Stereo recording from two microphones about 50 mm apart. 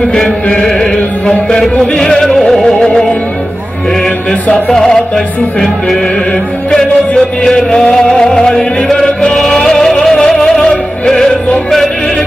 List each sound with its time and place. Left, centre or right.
0.6 s music: centre
4.3 s music: left